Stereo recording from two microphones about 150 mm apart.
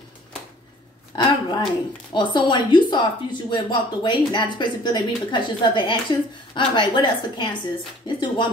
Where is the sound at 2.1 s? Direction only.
30° left (ahead or behind).